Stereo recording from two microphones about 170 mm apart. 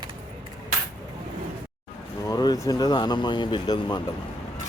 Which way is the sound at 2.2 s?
25° left (ahead or behind).